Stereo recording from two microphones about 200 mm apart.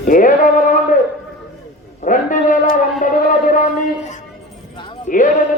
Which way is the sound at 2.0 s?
40° left (ahead or behind).